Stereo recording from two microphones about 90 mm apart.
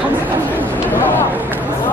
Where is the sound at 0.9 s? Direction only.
20° left (ahead or behind).